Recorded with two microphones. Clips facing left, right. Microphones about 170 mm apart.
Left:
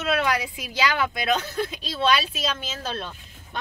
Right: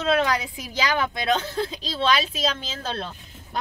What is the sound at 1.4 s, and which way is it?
Speech, 30° right (ahead or behind).